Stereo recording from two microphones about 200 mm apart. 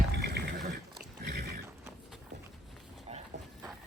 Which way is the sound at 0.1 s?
55° right (ahead or behind).